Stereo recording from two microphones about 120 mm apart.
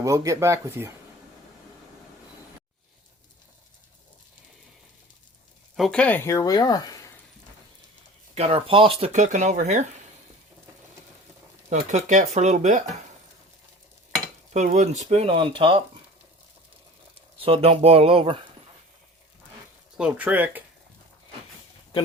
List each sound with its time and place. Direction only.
0.0 s speech: 30° right (ahead or behind)
5.7 s speech: 5° left (ahead or behind); by 7.1 s 30° left (ahead or behind)
8.4 s speech: 55° right (ahead or behind); by 9.8 s 85° right
11.7 s speech: 80° right
14.5 s speech: 75° right (ahead or behind); by 15.8 s 45° right (ahead or behind)
17.3 s speech: 55° right (ahead or behind)
20.0 s speech: 15° right (ahead or behind)